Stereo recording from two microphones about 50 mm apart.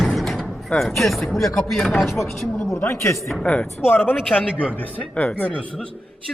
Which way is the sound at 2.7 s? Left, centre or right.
Left.